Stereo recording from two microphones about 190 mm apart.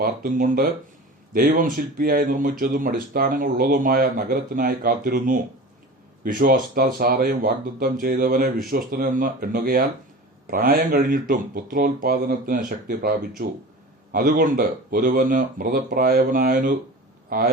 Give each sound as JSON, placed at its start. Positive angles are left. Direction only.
{"t": 0.0, "sound": "speech", "side_deg": -50}